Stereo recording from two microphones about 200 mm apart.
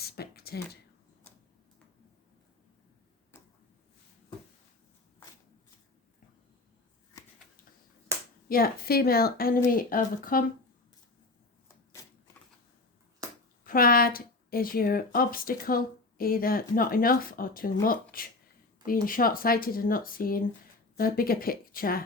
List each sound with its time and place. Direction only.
0.0 s a sound: 50° left (ahead or behind)
3.3 s tick-tock: 10° left (ahead or behind)
8.1 s finger snapping: 15° right (ahead or behind)
8.4 s speech: 45° left (ahead or behind)
13.7 s speech: 45° left (ahead or behind)